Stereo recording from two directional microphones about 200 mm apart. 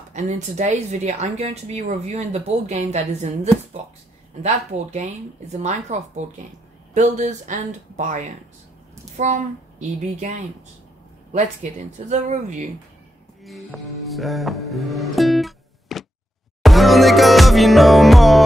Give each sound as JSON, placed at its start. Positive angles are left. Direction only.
{"t": 0.1, "sound": "speech", "side_deg": -35}
{"t": 4.4, "sound": "speech", "side_deg": -35}
{"t": 13.4, "sound": "music", "side_deg": 0}